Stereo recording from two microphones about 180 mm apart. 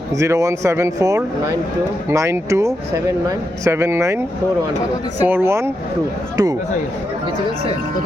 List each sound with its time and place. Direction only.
0.2 s speech: 15° right (ahead or behind)
5.2 s speech: 10° right (ahead or behind)